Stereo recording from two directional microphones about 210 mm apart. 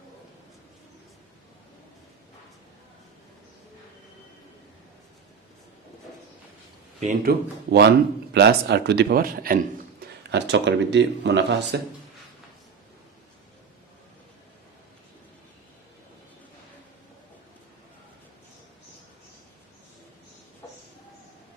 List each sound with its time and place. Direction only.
7.0 s speech: 45° right (ahead or behind)
10.3 s speech: 55° right (ahead or behind)